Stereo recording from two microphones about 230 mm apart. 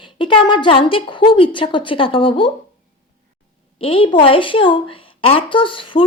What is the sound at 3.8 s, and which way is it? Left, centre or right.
A woman's voice, left.